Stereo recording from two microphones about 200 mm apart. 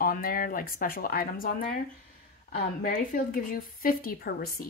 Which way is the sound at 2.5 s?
45° left (ahead or behind).